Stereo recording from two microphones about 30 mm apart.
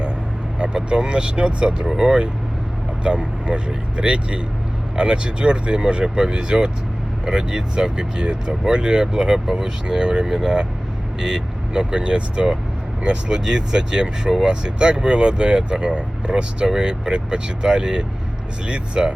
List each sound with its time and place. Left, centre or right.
0.6 s speech: right
3.0 s speech: right